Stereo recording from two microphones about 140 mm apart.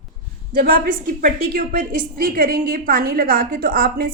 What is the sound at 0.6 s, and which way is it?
A woman's voice, 85° right.